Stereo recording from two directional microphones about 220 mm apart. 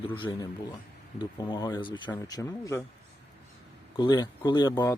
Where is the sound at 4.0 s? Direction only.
20° left (ahead or behind).